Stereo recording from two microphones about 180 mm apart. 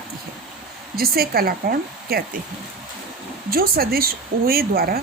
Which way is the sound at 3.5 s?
55° right (ahead or behind).